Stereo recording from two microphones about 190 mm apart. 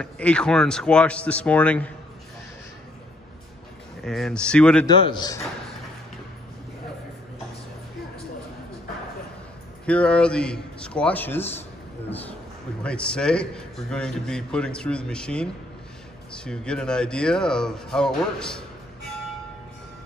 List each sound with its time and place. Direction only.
0.0 s speech: 5° left (ahead or behind)
4.0 s a man's voice: centre (ahead or behind)
4.8 s a man's voice: 25° left (ahead or behind)
9.8 s a man's voice: 5° left (ahead or behind)
12.8 s a man's voice: 5° left (ahead or behind)